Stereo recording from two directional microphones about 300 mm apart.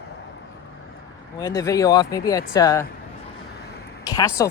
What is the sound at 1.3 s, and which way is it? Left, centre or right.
Speech, centre.